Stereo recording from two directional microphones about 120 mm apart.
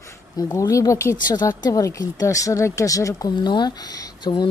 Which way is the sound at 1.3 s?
35° left (ahead or behind).